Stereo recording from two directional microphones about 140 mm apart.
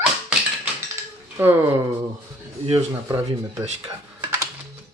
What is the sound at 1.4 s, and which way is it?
Speech, 15° right (ahead or behind).